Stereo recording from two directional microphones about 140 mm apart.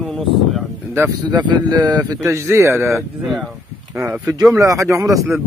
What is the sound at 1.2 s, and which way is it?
A man's voice, 30° right (ahead or behind).